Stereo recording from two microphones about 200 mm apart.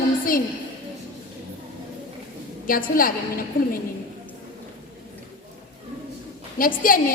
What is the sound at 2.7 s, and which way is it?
A woman's voice, 45° left (ahead or behind).